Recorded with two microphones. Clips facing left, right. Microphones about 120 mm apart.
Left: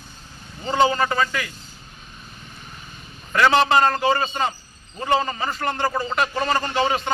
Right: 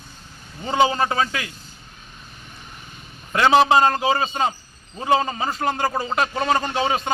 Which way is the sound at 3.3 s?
5° right (ahead or behind).